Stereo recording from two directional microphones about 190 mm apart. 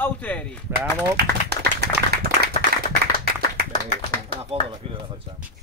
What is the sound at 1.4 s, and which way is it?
Clapping, 60° right (ahead or behind).